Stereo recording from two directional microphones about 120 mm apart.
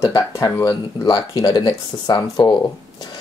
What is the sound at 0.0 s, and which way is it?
Speech, 25° left (ahead or behind).